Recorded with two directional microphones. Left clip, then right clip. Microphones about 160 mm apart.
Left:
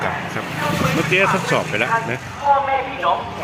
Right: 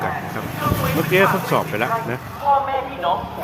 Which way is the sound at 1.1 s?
5° right (ahead or behind).